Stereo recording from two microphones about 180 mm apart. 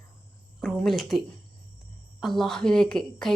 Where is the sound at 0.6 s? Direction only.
Centre (ahead or behind).